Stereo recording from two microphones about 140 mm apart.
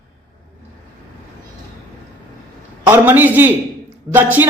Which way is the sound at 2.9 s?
15° right (ahead or behind).